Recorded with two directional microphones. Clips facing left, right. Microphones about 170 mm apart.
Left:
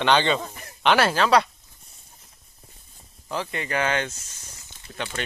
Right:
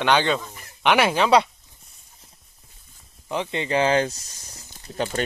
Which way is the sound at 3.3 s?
20° right (ahead or behind).